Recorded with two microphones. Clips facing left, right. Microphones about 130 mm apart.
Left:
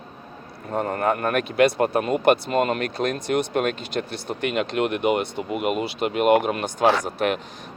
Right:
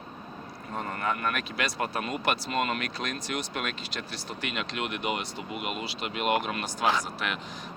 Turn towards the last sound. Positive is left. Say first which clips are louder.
# left 8 dB
turn(degrees=50)  # may be behind; listen again after turning